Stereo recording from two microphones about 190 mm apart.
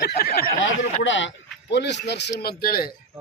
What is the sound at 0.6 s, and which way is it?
A man's voice, 80° left.